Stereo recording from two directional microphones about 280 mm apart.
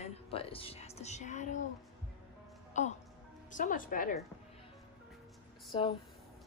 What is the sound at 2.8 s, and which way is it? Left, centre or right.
Speech, left.